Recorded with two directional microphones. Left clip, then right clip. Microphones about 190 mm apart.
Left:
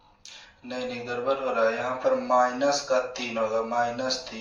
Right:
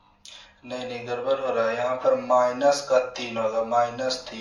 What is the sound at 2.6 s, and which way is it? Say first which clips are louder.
A man's voice: right 4 dB; 25° right (ahead or behind).